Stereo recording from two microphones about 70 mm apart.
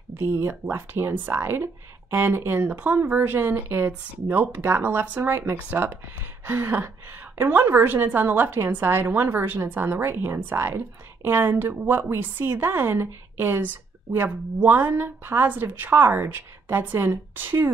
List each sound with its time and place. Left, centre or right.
0.2 s a woman's voice: right